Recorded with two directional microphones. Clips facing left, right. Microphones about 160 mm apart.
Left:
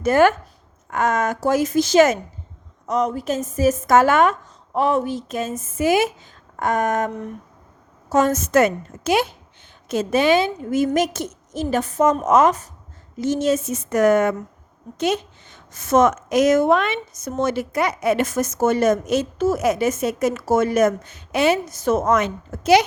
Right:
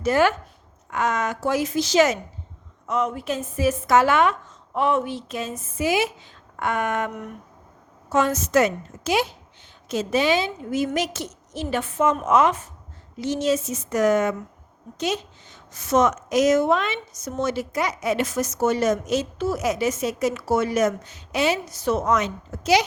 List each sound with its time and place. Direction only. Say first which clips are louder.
0.0 s a woman's voice: left 4 dB; 50° left (ahead or behind)
2.8 s a woman's voice: left 3 dB; 40° left (ahead or behind); by 22.8 s 55° left (ahead or behind)